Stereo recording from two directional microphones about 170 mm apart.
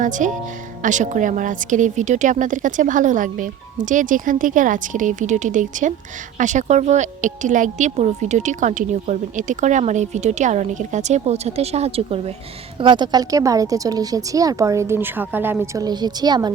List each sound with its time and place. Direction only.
0.0 s a woman's voice: 50° right (ahead or behind); by 16.5 s 25° right (ahead or behind)